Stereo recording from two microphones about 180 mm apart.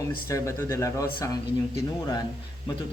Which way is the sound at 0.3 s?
15° left (ahead or behind).